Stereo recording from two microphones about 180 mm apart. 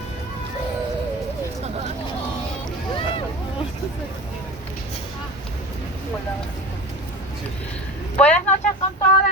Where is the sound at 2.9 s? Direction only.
30° left (ahead or behind).